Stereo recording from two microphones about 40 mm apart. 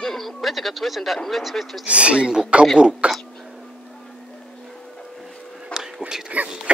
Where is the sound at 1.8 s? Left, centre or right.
Right.